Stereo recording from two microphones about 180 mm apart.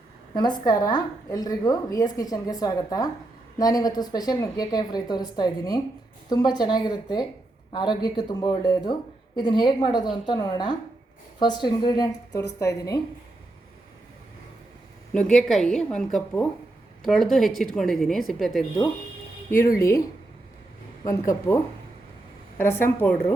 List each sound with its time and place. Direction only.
0.3 s a woman's voice: 25° left (ahead or behind)
15.1 s a woman's voice: 5° left (ahead or behind)
19.7 s a woman's voice: 15° left (ahead or behind)
21.0 s a woman's voice: 20° left (ahead or behind)